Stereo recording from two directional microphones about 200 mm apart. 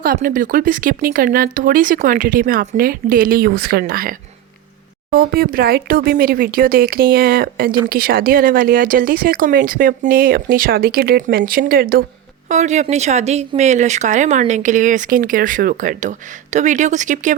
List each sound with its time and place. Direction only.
0.0 s speech: 45° right (ahead or behind)
5.1 s speech: 45° right (ahead or behind)
12.5 s speech: 35° right (ahead or behind)